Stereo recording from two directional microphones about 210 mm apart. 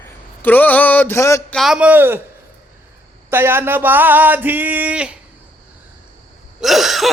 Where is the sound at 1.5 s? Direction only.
Centre (ahead or behind).